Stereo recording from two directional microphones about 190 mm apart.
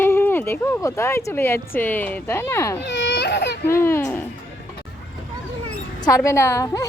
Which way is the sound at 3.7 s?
10° left (ahead or behind).